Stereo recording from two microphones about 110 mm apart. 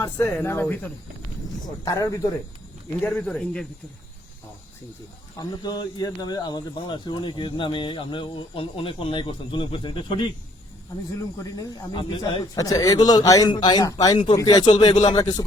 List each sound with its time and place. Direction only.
0.0 s speech: 25° left (ahead or behind)
0.6 s speech: 15° left (ahead or behind)
1.8 s a man's voice: 30° left (ahead or behind)
3.0 s speech: 15° left (ahead or behind)
5.4 s a man's voice: 40° left (ahead or behind)
11.4 s a man's voice: 35° left (ahead or behind)